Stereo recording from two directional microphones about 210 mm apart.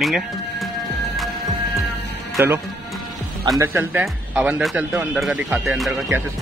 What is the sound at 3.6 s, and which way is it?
Speech, 15° right (ahead or behind).